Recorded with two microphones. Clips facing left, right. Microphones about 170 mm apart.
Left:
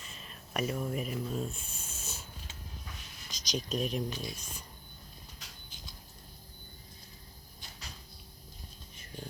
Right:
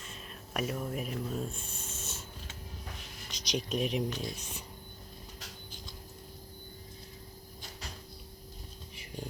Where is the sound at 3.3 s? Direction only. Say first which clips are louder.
Right 1 dB; 60° right (ahead or behind).